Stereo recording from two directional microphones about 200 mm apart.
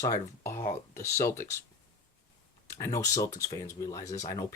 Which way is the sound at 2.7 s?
15° left (ahead or behind).